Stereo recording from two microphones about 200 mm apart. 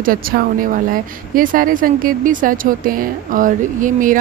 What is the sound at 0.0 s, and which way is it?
Speech, 45° right (ahead or behind).